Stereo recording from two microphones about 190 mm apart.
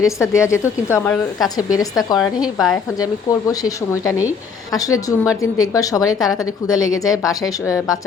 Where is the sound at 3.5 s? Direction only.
20° left (ahead or behind).